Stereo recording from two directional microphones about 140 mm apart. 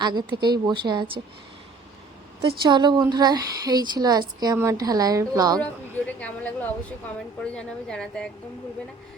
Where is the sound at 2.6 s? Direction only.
35° right (ahead or behind).